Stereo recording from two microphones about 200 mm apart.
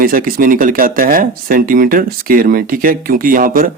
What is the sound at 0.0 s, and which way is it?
Speech, 45° right (ahead or behind).